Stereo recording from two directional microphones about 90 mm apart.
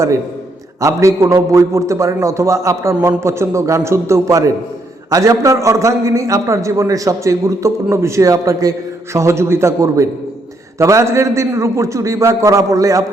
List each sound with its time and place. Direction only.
0.8 s a man's voice: 35° right (ahead or behind)